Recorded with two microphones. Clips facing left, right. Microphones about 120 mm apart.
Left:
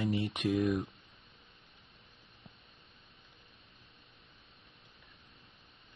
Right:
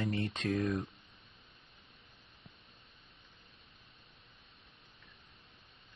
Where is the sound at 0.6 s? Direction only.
Centre (ahead or behind).